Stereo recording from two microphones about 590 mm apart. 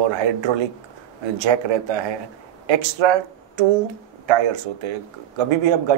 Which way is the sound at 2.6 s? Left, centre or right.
Right.